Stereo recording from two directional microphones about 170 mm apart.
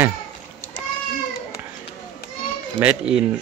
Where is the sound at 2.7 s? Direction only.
5° right (ahead or behind).